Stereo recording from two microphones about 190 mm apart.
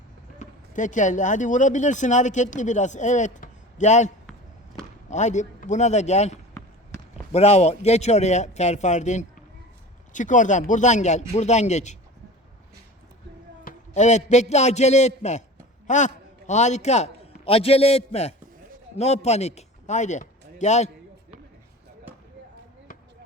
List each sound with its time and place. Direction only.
0.3 s a man's voice: 40° left (ahead or behind)
13.7 s a man's voice: 40° left (ahead or behind)